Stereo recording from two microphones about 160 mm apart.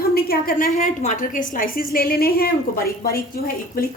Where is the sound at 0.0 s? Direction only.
75° left (ahead or behind).